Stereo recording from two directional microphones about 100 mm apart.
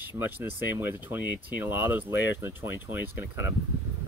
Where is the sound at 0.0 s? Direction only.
20° right (ahead or behind).